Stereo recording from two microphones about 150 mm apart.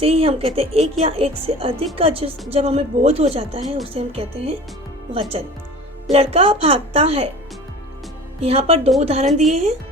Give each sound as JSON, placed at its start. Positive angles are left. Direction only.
{"t": 0.0, "sound": "a woman's voice", "side_deg": -40}
{"t": 6.1, "sound": "a woman's voice", "side_deg": -40}
{"t": 8.4, "sound": "a woman's voice", "side_deg": -40}